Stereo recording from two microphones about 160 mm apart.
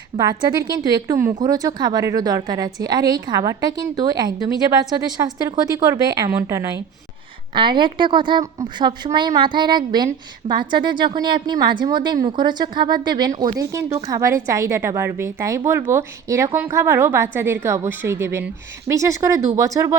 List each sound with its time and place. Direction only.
0.2 s a woman's voice: 25° right (ahead or behind)
7.5 s a woman's voice: 30° right (ahead or behind)
10.4 s a woman's voice: 40° right (ahead or behind)
10.8 s a woman's voice: 30° right (ahead or behind)